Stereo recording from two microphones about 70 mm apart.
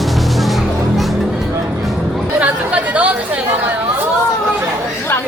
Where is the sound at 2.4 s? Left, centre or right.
Centre.